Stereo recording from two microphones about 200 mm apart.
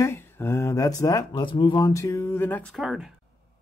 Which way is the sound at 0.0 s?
10° left (ahead or behind).